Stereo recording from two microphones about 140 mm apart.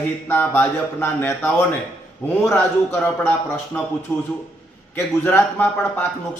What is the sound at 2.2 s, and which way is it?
Speech, 20° left (ahead or behind).